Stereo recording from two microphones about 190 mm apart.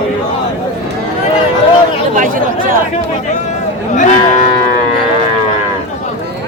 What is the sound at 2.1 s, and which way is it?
Chatter, 45° right (ahead or behind).